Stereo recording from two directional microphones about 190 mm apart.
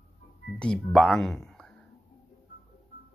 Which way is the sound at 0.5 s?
5° left (ahead or behind).